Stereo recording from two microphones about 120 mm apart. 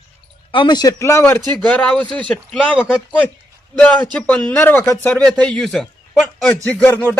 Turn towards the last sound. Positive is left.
turn(degrees=15)  # may be behind; listen again after turning